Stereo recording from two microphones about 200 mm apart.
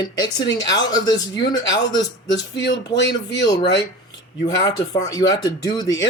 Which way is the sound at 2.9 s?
60° left (ahead or behind).